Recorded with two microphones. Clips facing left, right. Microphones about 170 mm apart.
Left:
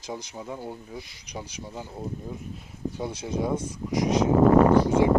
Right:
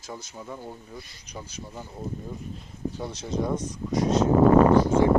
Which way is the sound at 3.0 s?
10° left (ahead or behind).